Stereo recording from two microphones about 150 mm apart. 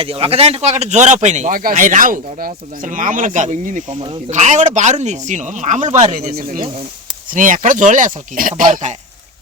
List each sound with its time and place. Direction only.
0.0 s speech: 40° right (ahead or behind)
6.3 s speech: 65° right (ahead or behind)